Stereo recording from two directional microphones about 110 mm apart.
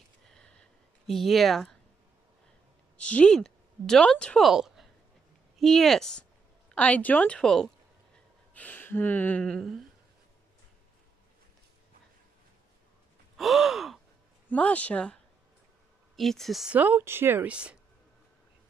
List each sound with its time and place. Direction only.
0.3 s a sound: 5° left (ahead or behind)
3.0 s speech: 10° left (ahead or behind)
4.5 s a woman's voice: 5° right (ahead or behind)
6.7 s gasp: 15° left (ahead or behind)
8.5 s gasp: 15° left (ahead or behind); by 9.8 s centre (ahead or behind)
13.4 s speech: centre (ahead or behind)
14.5 s gasp: 10° left (ahead or behind)
16.2 s speech: centre (ahead or behind)
16.7 s speech: 15° right (ahead or behind)